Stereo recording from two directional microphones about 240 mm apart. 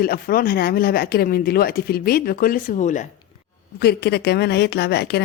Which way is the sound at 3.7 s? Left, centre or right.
Left.